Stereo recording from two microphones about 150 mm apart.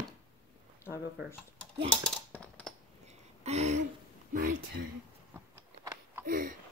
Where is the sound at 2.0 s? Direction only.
5° left (ahead or behind).